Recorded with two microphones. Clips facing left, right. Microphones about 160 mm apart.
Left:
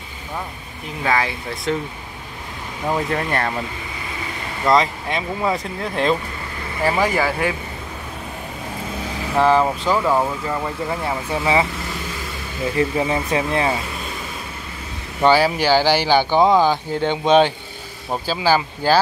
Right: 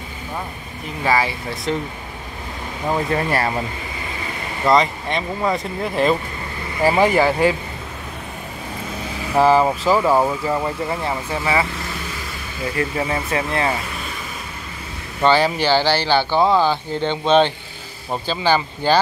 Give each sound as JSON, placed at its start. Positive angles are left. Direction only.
{"t": 1.0, "sound": "speech", "side_deg": -5}
{"t": 2.9, "sound": "speech", "side_deg": -5}
{"t": 4.6, "sound": "speech", "side_deg": 0}
{"t": 6.8, "sound": "speech", "side_deg": -15}
{"t": 9.4, "sound": "speech", "side_deg": -5}
{"t": 11.3, "sound": "speech", "side_deg": 15}
{"t": 12.7, "sound": "speech", "side_deg": 20}
{"t": 15.2, "sound": "speech", "side_deg": 10}